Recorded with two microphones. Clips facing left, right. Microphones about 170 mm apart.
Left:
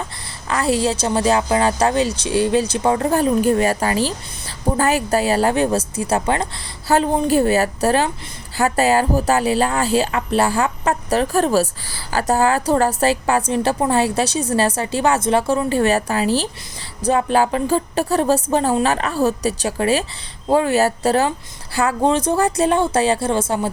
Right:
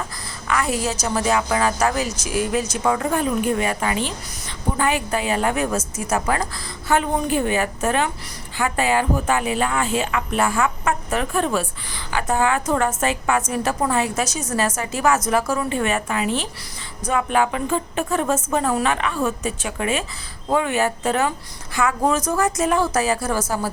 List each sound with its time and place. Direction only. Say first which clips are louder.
0.4 s a woman's voice: left 4 dB; 30° left (ahead or behind)